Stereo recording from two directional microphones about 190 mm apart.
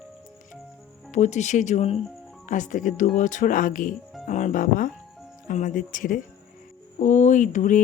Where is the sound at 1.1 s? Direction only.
40° left (ahead or behind).